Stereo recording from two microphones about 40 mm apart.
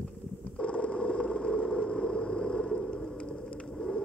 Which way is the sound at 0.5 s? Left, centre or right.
Left.